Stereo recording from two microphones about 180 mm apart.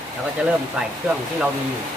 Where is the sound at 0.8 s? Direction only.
5° right (ahead or behind).